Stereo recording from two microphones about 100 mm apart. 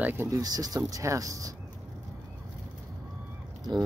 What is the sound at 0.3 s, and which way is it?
Speech, 40° right (ahead or behind).